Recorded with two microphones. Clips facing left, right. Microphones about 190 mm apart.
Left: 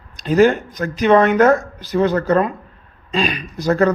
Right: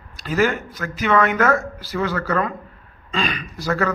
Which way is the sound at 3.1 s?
15° left (ahead or behind).